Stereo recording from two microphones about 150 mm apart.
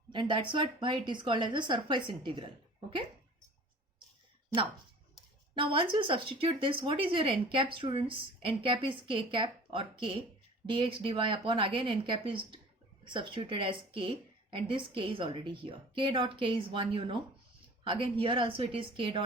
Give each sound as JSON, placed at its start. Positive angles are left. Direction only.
{"t": 0.1, "sound": "speech", "side_deg": -30}
{"t": 5.5, "sound": "speech", "side_deg": -35}